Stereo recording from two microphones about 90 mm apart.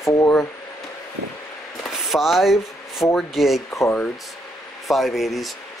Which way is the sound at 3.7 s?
30° left (ahead or behind).